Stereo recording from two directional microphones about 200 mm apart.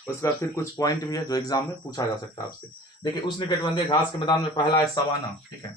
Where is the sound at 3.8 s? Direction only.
20° left (ahead or behind).